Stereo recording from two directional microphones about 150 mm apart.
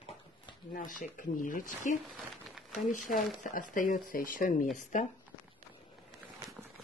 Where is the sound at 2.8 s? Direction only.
60° left (ahead or behind).